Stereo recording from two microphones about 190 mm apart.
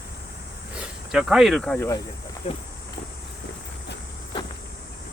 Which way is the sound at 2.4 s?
35° left (ahead or behind).